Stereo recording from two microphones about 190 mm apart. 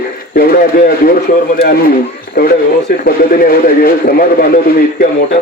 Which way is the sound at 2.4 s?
50° left (ahead or behind).